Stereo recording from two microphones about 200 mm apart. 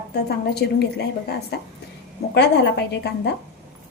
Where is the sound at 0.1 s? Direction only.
55° left (ahead or behind).